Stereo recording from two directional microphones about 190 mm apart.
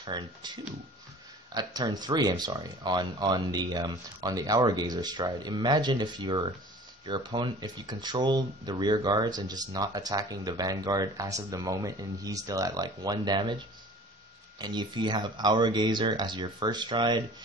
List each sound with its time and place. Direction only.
0.0 s speech: 25° right (ahead or behind)
14.6 s speech: 20° right (ahead or behind)